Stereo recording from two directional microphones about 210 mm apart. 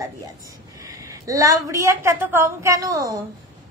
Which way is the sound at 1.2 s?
15° right (ahead or behind).